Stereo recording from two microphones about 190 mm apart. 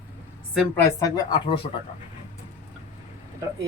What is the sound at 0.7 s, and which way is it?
Speech, 20° left (ahead or behind).